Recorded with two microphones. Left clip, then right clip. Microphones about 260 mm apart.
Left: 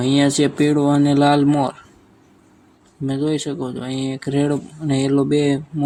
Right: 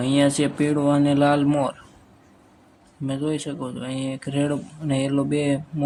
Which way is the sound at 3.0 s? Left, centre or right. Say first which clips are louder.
Left 5 dB; centre.